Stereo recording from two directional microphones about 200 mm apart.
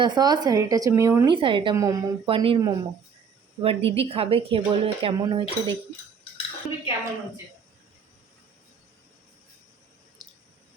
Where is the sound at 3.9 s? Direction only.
30° right (ahead or behind).